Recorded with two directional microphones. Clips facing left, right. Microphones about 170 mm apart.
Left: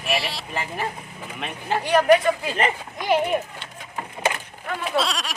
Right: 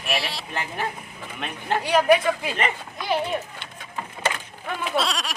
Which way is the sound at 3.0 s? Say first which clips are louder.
Left 4 dB; 15° left (ahead or behind).